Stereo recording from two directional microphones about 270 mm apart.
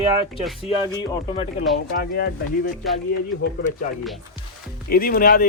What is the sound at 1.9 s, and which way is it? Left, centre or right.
Speech, left.